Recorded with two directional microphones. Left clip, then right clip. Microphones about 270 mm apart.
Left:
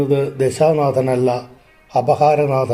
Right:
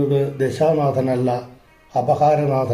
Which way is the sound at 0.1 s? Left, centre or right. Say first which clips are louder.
Left 3 dB; left.